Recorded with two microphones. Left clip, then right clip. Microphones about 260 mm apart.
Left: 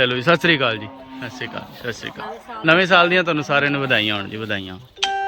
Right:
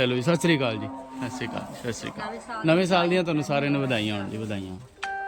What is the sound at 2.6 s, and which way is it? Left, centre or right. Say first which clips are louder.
A man's voice: left 8 dB; centre.